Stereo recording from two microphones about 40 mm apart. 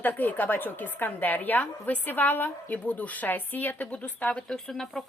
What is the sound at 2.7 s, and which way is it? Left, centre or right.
A woman's voice, left.